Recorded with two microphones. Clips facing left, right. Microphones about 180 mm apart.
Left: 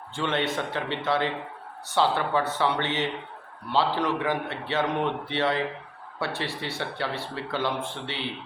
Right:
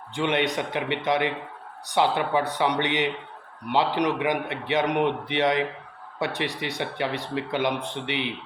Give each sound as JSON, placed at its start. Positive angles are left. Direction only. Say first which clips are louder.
{"t": 0.1, "sound": "speech", "louder": "right 3 dB", "side_deg": -15}